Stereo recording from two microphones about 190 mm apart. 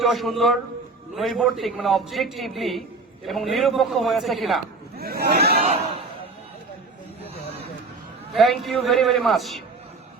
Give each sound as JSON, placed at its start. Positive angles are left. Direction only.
{"t": 0.0, "sound": "a man's voice", "side_deg": 0}
{"t": 4.9, "sound": "speech", "side_deg": -55}
{"t": 8.3, "sound": "a man's voice", "side_deg": 0}